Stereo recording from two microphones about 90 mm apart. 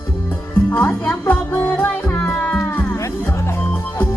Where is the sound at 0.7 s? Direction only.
20° left (ahead or behind).